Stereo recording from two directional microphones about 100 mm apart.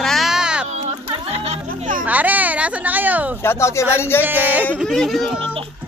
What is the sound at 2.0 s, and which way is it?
Speech, 15° right (ahead or behind).